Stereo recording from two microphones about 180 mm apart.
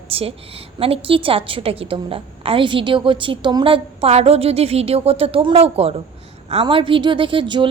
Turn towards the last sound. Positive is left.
turn(degrees=-25)  # may be behind; listen again after turning